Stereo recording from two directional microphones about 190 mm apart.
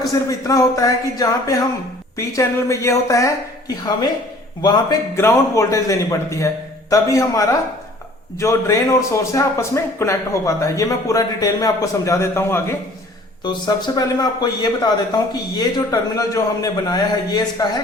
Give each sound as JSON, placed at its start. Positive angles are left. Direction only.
{"t": 0.0, "sound": "a man's voice", "side_deg": 15}
{"t": 4.6, "sound": "a man's voice", "side_deg": 20}